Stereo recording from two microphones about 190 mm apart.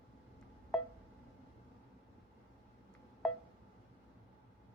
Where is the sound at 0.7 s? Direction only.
5° left (ahead or behind).